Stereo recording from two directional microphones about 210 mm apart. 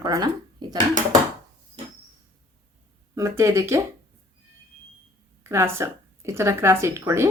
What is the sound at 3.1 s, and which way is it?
Speech, 15° right (ahead or behind).